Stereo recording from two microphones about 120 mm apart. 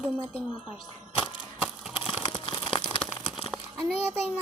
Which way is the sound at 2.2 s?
45° left (ahead or behind).